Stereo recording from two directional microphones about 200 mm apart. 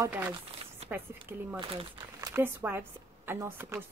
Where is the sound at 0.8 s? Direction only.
10° right (ahead or behind).